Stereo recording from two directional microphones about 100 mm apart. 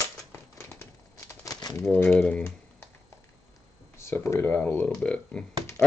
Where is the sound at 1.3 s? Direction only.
35° left (ahead or behind).